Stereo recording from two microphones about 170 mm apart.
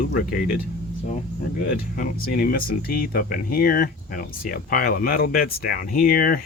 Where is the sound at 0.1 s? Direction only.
55° left (ahead or behind).